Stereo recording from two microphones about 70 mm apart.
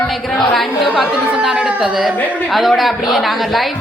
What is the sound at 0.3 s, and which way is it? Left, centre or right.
A woman's voice, centre.